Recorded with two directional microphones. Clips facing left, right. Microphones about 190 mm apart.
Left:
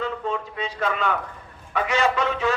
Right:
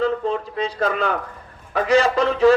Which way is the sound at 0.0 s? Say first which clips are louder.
Right 6 dB; 35° right (ahead or behind).